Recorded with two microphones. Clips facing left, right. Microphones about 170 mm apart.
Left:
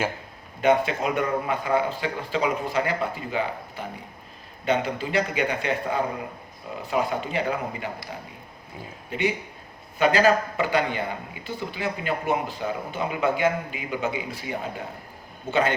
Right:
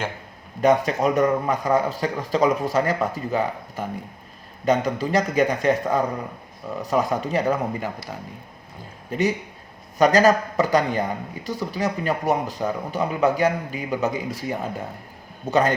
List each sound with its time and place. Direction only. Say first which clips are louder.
0.6 s a man's voice: right 3 dB; 40° right (ahead or behind)
9.0 s a man's voice: right 3 dB; 40° right (ahead or behind)